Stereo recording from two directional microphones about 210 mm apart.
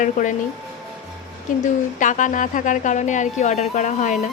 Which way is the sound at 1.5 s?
40° left (ahead or behind).